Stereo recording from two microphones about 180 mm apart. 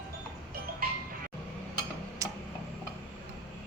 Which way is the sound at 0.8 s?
55° right (ahead or behind).